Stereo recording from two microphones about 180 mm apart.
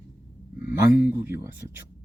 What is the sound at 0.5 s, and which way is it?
Speech, 10° right (ahead or behind).